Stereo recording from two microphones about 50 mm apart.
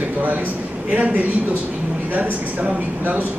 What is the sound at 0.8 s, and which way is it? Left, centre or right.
Speech, right.